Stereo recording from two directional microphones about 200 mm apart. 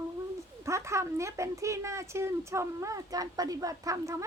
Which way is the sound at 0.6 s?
15° right (ahead or behind).